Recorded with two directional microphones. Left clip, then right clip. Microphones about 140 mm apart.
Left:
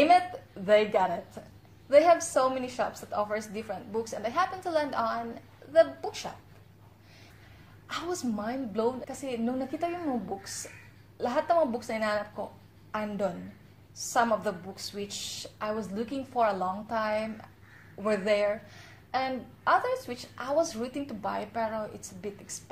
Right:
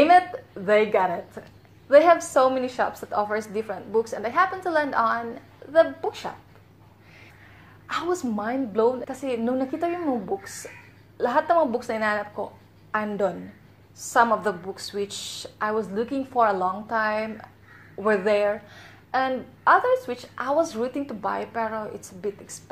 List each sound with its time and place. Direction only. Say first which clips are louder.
0.7 s a woman's voice: right 4 dB; 10° right (ahead or behind)
7.8 s a woman's voice: right 7 dB; 20° right (ahead or behind)